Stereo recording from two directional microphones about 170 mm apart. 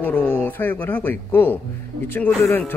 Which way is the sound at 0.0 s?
10° left (ahead or behind).